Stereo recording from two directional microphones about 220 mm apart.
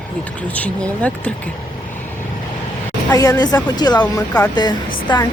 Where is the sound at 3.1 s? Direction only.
15° left (ahead or behind).